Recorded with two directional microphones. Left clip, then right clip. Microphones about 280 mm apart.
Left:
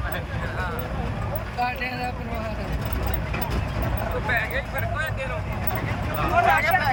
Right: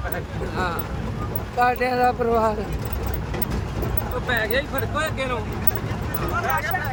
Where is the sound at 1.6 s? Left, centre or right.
Centre.